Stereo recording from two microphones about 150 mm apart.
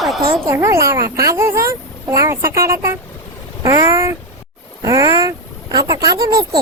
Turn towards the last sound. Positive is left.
turn(degrees=-25)  # may be behind; listen again after turning